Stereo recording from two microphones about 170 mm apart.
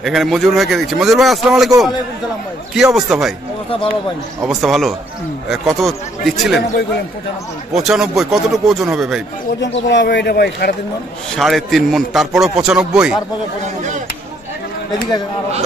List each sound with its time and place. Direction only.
0.0 s a man's voice: centre (ahead or behind)
2.7 s a man's voice: 5° right (ahead or behind)
4.5 s a man's voice: centre (ahead or behind)
7.7 s a man's voice: 5° right (ahead or behind)
9.8 s speech: 90° left; by 10.7 s 70° left (ahead or behind)
11.3 s a man's voice: centre (ahead or behind)